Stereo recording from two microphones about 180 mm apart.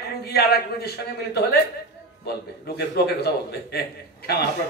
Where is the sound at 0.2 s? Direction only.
60° left (ahead or behind).